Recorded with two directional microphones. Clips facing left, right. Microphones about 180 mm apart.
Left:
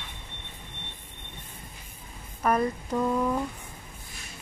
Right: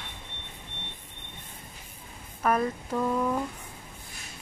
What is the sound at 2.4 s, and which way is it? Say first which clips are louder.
Speech: left 1 dB; centre (ahead or behind).